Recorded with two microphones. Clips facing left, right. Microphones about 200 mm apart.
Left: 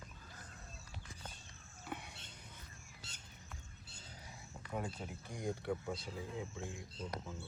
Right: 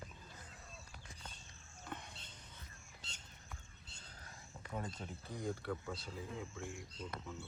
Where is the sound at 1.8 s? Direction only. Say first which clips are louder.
Left 2 dB; 10° left (ahead or behind).